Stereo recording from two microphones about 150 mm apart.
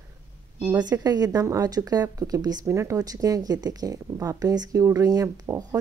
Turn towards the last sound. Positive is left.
turn(degrees=-25)  # may be behind; listen again after turning